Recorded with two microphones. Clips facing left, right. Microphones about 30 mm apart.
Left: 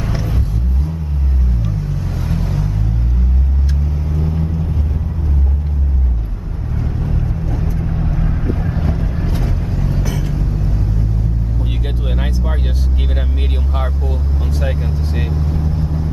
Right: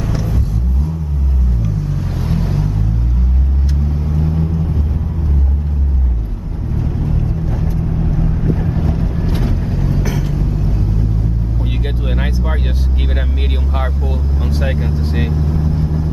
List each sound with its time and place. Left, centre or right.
0.0 s vehicle: left
2.2 s vehicle: centre
4.1 s vehicle: centre
6.8 s vehicle: centre
7.8 s vehicle: centre
12.1 s vehicle: centre
14.6 s vehicle: centre